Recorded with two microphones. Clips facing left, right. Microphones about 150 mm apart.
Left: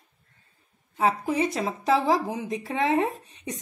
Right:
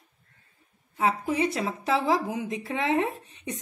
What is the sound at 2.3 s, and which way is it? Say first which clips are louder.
Speech: even; 35° left (ahead or behind).